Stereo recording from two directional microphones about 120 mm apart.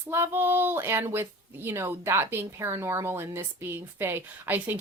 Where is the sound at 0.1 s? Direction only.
20° right (ahead or behind).